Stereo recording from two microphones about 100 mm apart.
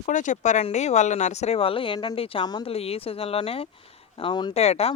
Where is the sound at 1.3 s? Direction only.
90° left; by 2.4 s 65° left (ahead or behind).